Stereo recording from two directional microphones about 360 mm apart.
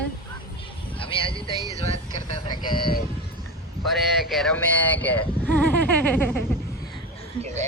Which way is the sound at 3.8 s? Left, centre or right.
Centre.